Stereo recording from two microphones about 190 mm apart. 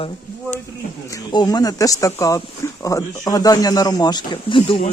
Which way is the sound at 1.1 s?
20° left (ahead or behind).